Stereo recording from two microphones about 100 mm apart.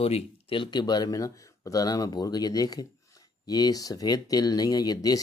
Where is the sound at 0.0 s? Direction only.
70° left (ahead or behind).